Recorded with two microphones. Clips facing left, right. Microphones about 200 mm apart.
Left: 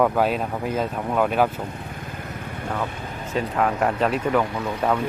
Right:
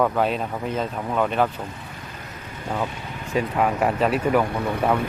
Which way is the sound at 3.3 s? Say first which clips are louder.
Right 1 dB; 10° right (ahead or behind).